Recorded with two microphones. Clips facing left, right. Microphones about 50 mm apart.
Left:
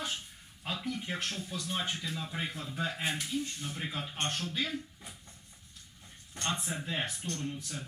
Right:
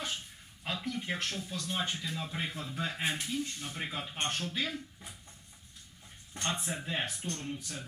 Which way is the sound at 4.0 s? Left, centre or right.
Centre.